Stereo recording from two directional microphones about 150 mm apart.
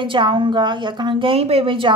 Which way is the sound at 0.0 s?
35° right (ahead or behind).